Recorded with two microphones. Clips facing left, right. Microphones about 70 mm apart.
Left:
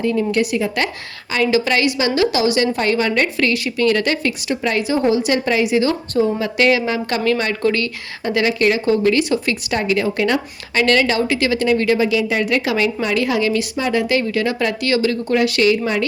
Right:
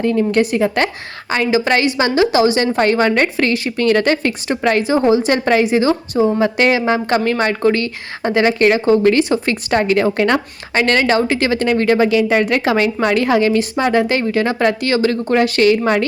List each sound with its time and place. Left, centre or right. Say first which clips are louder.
0.0 s a woman's voice: right 3 dB; right
1.3 s a woman's voice: right 2 dB; right